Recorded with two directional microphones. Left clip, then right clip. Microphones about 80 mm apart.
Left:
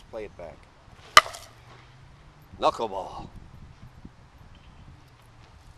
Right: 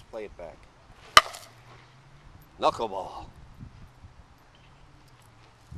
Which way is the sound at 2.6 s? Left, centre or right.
Centre.